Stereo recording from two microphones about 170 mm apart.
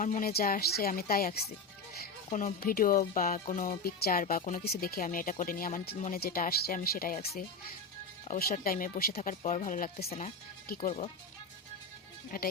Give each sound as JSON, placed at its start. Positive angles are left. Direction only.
{"t": 0.0, "sound": "speech", "side_deg": 55}
{"t": 4.6, "sound": "speech", "side_deg": 65}
{"t": 8.3, "sound": "speech", "side_deg": 55}
{"t": 9.2, "sound": "speech", "side_deg": 45}